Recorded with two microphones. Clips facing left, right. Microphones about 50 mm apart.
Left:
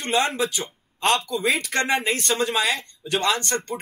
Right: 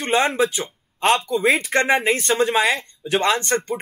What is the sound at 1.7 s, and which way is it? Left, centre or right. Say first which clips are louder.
Speech: right 5 dB; right.